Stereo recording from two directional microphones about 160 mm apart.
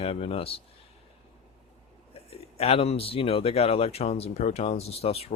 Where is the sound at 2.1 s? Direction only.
40° left (ahead or behind).